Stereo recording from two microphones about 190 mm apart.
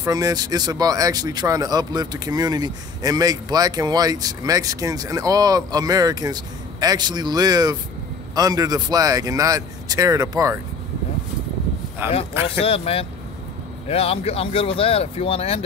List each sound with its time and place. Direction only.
0.0 s speech: 20° right (ahead or behind)
12.0 s a man's voice: 10° right (ahead or behind)
12.6 s speech: 30° left (ahead or behind)